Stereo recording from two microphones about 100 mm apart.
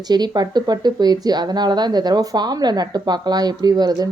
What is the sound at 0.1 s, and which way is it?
A woman's voice, 45° right (ahead or behind).